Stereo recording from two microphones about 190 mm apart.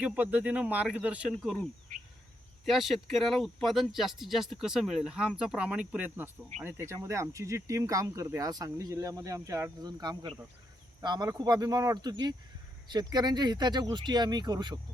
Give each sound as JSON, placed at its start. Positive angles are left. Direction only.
{"t": 0.0, "sound": "speech", "side_deg": -10}
{"t": 2.6, "sound": "speech", "side_deg": 0}